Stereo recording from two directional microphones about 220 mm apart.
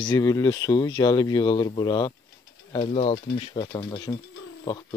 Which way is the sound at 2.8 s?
30° left (ahead or behind).